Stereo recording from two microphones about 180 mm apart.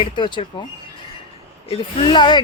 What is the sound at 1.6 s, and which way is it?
Speech, 30° left (ahead or behind).